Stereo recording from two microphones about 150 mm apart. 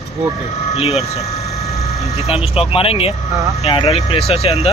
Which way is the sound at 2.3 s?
40° left (ahead or behind).